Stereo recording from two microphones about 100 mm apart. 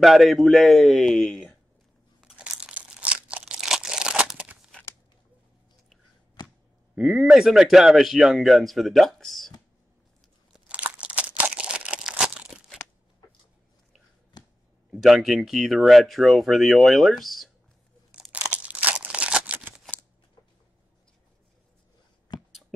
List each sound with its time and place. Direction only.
0.0 s speech: centre (ahead or behind)
2.2 s crumpling: 10° right (ahead or behind)
6.4 s a sound: 45° left (ahead or behind)
7.0 s speech: 5° right (ahead or behind)
10.7 s crunch: 10° right (ahead or behind)
14.3 s a sound: 45° left (ahead or behind)
15.0 s speech: centre (ahead or behind)
18.1 s crumpling: 10° right (ahead or behind)
22.5 s beatboxing: centre (ahead or behind)